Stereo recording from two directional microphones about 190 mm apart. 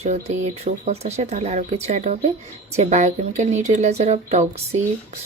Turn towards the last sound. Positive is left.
turn(degrees=-35)  # may be behind; listen again after turning